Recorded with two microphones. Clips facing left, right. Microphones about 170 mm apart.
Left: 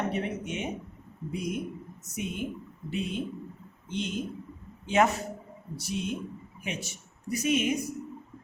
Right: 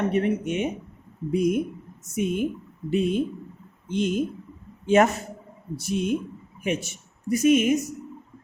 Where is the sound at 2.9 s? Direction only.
50° right (ahead or behind).